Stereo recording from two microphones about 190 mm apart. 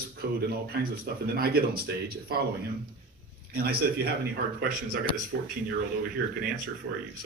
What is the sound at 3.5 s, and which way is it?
Speech, 55° right (ahead or behind).